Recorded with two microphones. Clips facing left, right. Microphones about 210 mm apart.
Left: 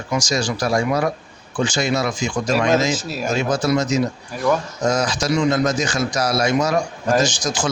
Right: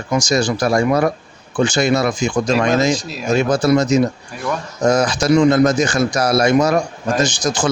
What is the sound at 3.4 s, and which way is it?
A man's voice, 55° right (ahead or behind).